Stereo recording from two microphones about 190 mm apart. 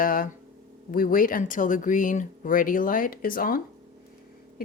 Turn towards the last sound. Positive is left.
turn(degrees=45)  # may be behind; listen again after turning